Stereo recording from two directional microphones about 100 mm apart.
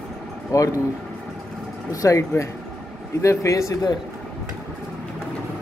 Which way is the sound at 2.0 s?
30° left (ahead or behind).